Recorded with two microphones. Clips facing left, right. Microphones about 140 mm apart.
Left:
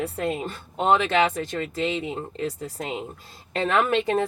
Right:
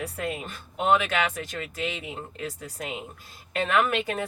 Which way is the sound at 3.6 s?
30° left (ahead or behind).